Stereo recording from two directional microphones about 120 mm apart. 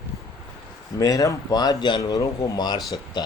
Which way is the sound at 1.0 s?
30° left (ahead or behind).